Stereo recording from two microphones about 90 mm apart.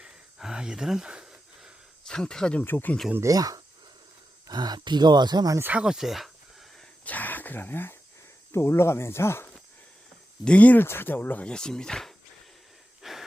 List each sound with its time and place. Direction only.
0.0 s a sound: 5° right (ahead or behind)
2.0 s speech: 5° left (ahead or behind)
2.6 s speech: 20° left (ahead or behind)
3.2 s speech: 40° right (ahead or behind)
5.7 s speech: 5° right (ahead or behind)
7.0 s speech: 20° left (ahead or behind)
10.4 s speech: 15° left (ahead or behind)
13.0 s wheeze: centre (ahead or behind)